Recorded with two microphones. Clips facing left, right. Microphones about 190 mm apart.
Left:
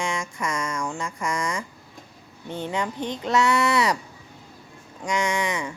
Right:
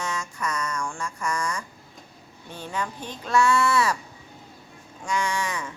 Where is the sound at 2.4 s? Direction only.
20° left (ahead or behind).